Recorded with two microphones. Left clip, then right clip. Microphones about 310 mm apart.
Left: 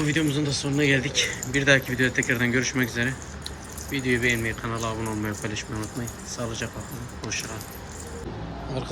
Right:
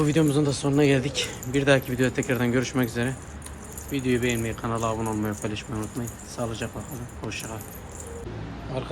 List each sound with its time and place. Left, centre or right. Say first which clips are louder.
0.0 s speech: right 2 dB; centre
0.4 s speech: right 2 dB; right
0.7 s speech: even; centre